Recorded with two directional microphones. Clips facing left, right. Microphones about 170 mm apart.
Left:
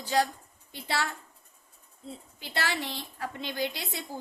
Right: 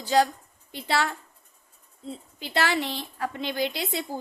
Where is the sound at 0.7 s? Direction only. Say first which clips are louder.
Right 5 dB; 75° right (ahead or behind).